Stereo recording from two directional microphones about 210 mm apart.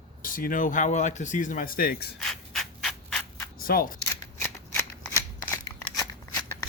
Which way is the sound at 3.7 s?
40° left (ahead or behind).